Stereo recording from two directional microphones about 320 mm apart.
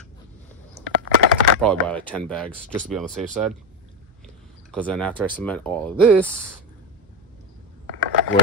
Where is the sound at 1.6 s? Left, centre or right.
Centre.